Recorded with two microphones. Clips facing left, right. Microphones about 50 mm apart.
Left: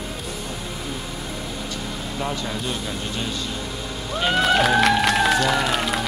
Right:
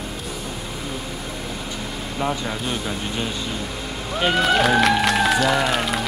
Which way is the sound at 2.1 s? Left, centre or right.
Centre.